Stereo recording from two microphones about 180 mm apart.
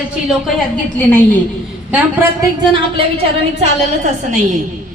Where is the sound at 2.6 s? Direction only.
25° right (ahead or behind).